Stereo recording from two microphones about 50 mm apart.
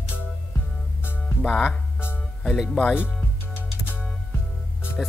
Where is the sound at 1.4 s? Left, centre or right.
Centre.